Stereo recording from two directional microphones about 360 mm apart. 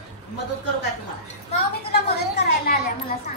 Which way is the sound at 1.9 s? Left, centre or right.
Left.